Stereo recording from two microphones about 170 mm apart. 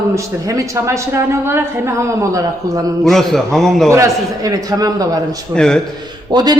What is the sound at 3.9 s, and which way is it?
A man's voice, 20° right (ahead or behind).